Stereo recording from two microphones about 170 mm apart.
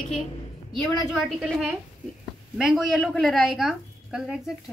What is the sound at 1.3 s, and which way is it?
A woman's voice, centre (ahead or behind).